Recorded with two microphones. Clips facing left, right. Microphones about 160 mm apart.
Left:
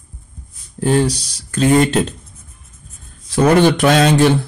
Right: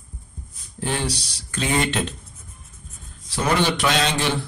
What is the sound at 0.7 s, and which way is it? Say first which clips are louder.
Speech: left 11 dB; 45° left (ahead or behind).